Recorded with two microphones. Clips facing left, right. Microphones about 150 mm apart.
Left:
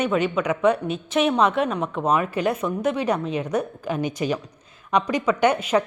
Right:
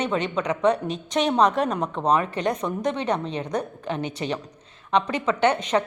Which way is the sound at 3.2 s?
30° right (ahead or behind).